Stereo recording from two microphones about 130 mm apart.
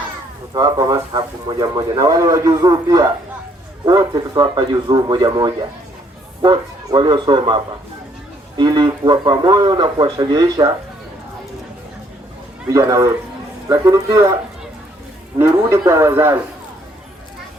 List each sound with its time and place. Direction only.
0.5 s a man's voice: 30° right (ahead or behind)
12.6 s a man's voice: 25° right (ahead or behind)
15.4 s a man's voice: 20° right (ahead or behind)